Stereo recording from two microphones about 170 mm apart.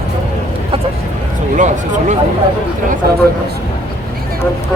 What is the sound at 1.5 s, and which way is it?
Speech, 45° right (ahead or behind).